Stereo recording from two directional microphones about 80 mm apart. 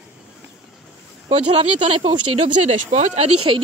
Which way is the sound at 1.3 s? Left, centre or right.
Right.